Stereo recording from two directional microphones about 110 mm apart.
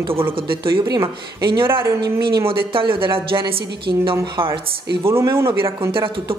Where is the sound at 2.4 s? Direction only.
50° right (ahead or behind).